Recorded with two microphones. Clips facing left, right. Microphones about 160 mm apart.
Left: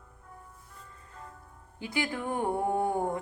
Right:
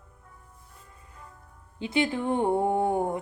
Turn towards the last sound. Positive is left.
turn(degrees=-20)  # may be behind; listen again after turning